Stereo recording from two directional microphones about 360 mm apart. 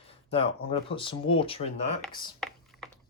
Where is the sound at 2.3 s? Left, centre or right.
Centre.